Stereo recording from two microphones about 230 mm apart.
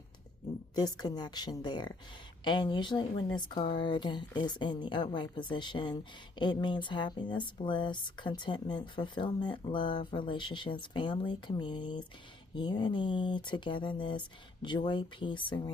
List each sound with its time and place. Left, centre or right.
0.8 s a woman's voice: centre